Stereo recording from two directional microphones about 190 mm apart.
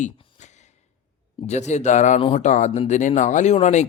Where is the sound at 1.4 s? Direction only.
35° left (ahead or behind).